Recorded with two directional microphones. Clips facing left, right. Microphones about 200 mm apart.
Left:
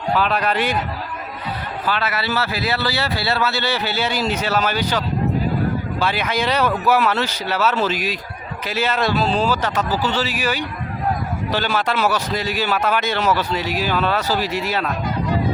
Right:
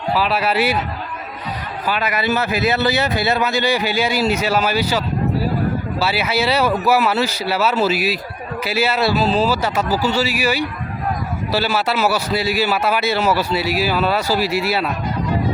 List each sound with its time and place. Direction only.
0.1 s a man's voice: 5° right (ahead or behind)
1.9 s a man's voice: 15° right (ahead or behind)